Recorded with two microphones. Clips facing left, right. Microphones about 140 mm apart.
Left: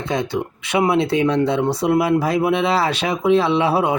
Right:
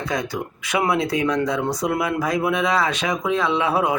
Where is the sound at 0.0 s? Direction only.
25° left (ahead or behind).